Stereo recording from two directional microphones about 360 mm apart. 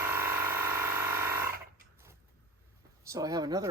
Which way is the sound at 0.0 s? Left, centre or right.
Centre.